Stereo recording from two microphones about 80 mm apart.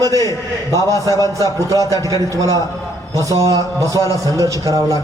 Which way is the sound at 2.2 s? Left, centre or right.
Right.